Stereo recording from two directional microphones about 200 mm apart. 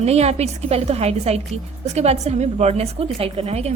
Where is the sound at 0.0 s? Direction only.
30° right (ahead or behind).